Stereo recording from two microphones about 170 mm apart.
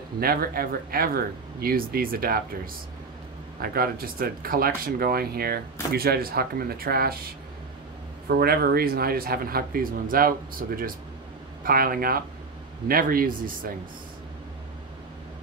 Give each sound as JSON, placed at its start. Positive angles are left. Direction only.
{"t": 0.2, "sound": "speech", "side_deg": -60}
{"t": 8.3, "sound": "speech", "side_deg": -65}